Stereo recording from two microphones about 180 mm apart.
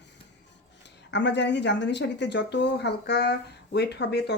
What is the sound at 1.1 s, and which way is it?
Speech, 75° left (ahead or behind).